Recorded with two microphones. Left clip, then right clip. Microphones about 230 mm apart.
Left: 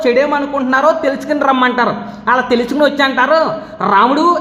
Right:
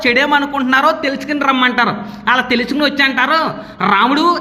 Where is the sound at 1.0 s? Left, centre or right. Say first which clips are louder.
Left 2 dB; right.